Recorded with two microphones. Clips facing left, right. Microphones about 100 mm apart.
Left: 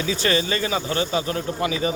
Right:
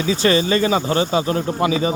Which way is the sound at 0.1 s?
25° right (ahead or behind).